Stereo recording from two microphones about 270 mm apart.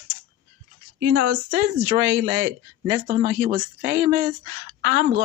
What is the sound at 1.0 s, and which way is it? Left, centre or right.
Speech, right.